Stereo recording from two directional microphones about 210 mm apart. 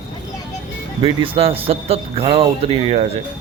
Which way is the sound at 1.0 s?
25° right (ahead or behind).